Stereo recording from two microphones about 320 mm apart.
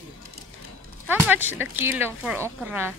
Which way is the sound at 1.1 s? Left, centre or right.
Centre.